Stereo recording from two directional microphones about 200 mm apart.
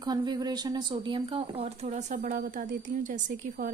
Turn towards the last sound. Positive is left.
turn(degrees=-40)  # may be behind; listen again after turning